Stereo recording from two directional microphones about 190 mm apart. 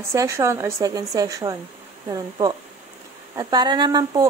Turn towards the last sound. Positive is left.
turn(degrees=-20)  # may be behind; listen again after turning